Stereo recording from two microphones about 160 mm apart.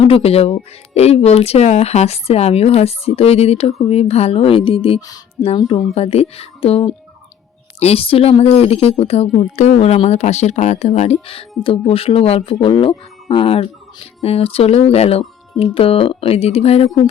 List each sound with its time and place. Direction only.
0.0 s speech: 35° left (ahead or behind)
4.9 s speech: 20° left (ahead or behind)
5.9 s speech: 40° left (ahead or behind)